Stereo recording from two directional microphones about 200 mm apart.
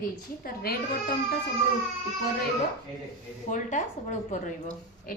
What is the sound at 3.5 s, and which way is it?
A woman's voice, 35° left (ahead or behind).